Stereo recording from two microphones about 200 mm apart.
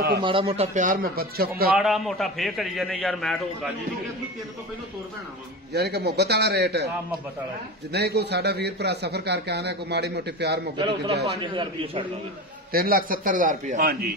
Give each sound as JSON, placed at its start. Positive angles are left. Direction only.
{"t": 0.2, "sound": "a man's voice", "side_deg": -25}
{"t": 1.7, "sound": "a man's voice", "side_deg": 0}
{"t": 5.7, "sound": "a man's voice", "side_deg": -55}
{"t": 7.9, "sound": "a man's voice", "side_deg": -55}
{"t": 11.2, "sound": "a man's voice", "side_deg": -25}
{"t": 12.7, "sound": "a man's voice", "side_deg": -45}